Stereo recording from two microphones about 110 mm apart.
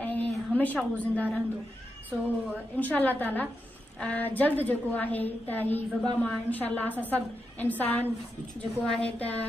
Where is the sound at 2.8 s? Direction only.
15° left (ahead or behind).